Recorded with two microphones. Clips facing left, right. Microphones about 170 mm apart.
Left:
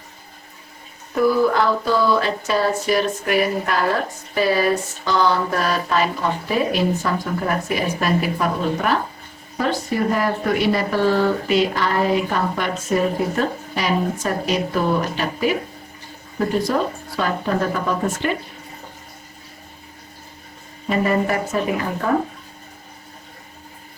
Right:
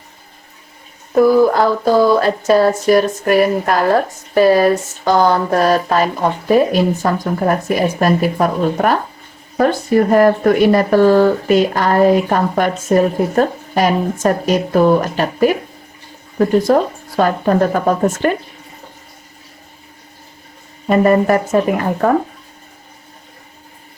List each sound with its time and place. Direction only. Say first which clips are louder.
1.1 s speech: right 6 dB; 45° right (ahead or behind)
16.6 s speech: right 7 dB; 50° right (ahead or behind)
20.9 s speech: right 8 dB; 50° right (ahead or behind)